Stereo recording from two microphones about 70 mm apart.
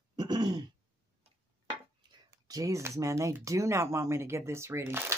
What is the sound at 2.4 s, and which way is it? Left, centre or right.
Speech, right.